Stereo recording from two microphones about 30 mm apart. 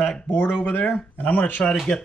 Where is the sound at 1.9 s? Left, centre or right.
Centre.